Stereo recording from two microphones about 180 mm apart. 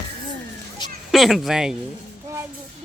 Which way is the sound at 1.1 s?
Centre (ahead or behind).